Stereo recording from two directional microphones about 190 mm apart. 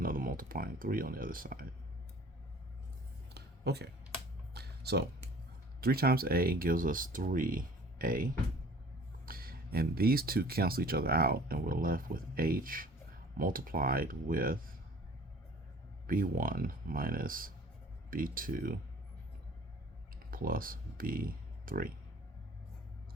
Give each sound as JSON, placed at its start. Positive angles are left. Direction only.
{"t": 0.0, "sound": "speech", "side_deg": -50}
{"t": 3.3, "sound": "a sound", "side_deg": -60}
{"t": 5.8, "sound": "speech", "side_deg": -50}
{"t": 16.0, "sound": "speech", "side_deg": -50}
{"t": 20.3, "sound": "speech", "side_deg": -50}